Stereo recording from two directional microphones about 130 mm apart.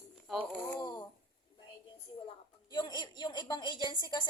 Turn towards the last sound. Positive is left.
turn(degrees=35)  # may be behind; listen again after turning